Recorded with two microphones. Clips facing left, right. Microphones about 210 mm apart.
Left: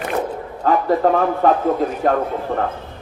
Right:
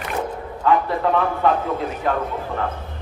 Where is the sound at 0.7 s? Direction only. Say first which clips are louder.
Left 3 dB; 40° left (ahead or behind).